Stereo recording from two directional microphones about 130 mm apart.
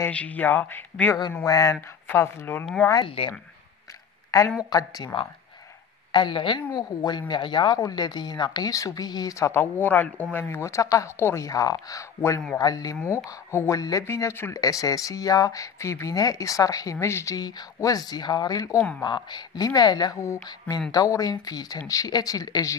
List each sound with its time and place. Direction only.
0.0 s speech: 10° left (ahead or behind)
1.3 s speech: 25° left (ahead or behind)
2.6 s speech: 5° left (ahead or behind)
3.1 s speech: 45° left (ahead or behind)
4.6 s speech: 30° left (ahead or behind)
6.1 s a woman's voice: 40° left (ahead or behind)